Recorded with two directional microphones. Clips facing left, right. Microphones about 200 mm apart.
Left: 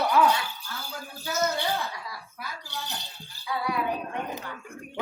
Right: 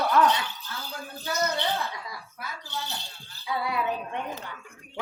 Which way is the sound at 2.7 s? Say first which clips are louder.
Right 3 dB; 15° left (ahead or behind).